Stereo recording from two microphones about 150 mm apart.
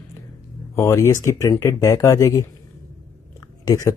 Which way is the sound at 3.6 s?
25° left (ahead or behind).